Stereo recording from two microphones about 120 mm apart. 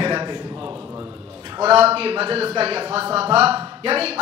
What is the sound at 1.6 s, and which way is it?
A man's voice, 55° right (ahead or behind).